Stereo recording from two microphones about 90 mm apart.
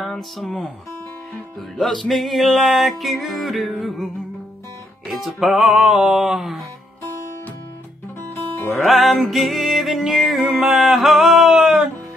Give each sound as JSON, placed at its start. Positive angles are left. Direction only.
{"t": 0.0, "sound": "speech", "side_deg": 0}
{"t": 1.8, "sound": "music", "side_deg": 0}
{"t": 8.7, "sound": "music", "side_deg": 0}